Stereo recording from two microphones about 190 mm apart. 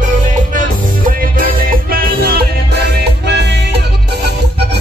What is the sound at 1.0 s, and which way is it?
Music, 45° right (ahead or behind).